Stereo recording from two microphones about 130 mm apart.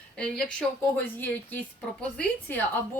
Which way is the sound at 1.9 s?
10° left (ahead or behind).